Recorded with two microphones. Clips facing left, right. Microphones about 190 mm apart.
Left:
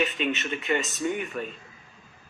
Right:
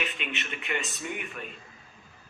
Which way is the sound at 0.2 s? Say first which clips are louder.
Left 8 dB; 40° left (ahead or behind).